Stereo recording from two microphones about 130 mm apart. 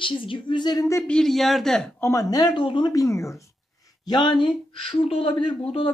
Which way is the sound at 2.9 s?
25° left (ahead or behind).